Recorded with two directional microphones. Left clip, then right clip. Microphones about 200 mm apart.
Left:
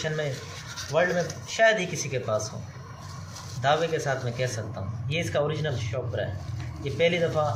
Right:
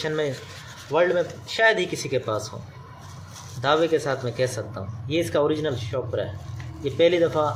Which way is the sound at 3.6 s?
65° right (ahead or behind).